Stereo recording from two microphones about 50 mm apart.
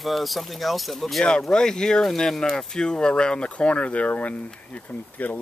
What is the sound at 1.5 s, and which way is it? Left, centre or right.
Speech, centre.